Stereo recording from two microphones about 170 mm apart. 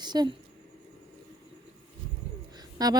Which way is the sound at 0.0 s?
25° right (ahead or behind).